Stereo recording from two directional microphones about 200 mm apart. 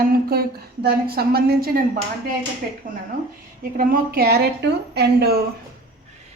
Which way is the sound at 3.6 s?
45° right (ahead or behind).